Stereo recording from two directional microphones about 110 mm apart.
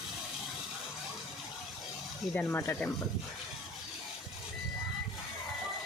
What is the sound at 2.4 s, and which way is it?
Speech, 25° left (ahead or behind).